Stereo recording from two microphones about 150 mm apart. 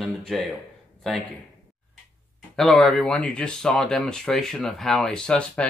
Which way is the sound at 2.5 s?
Centre (ahead or behind).